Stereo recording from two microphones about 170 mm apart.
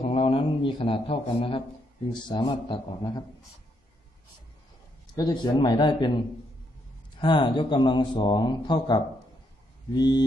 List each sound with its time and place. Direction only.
0.1 s speech: 30° left (ahead or behind)
5.1 s speech: 20° left (ahead or behind)
7.2 s speech: 25° left (ahead or behind)